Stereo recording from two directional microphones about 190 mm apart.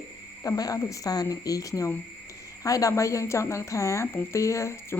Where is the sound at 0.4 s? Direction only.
20° left (ahead or behind).